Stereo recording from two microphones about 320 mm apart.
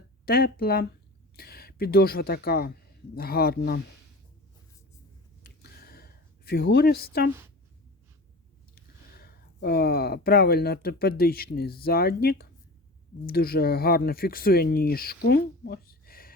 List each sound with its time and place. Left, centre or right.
0.3 s speech: left
5.4 s a sound: left
8.7 s speech: left